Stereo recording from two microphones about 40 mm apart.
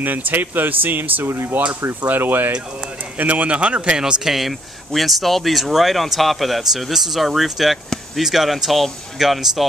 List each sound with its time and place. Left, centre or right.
0.0 s speech: right
1.2 s speech: right
1.6 s speech: right
2.1 s speech: right
3.2 s speech: right
4.2 s speech: centre